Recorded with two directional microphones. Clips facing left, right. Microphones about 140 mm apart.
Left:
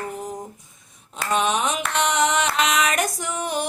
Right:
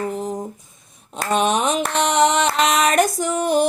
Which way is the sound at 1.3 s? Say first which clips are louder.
Right 4 dB; 35° right (ahead or behind).